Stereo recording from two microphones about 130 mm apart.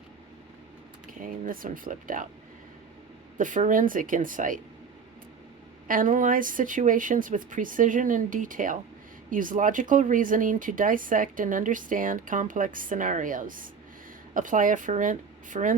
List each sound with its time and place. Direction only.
1.2 s speech: 90° right
3.3 s speech: 90° right
5.9 s speech: 90° right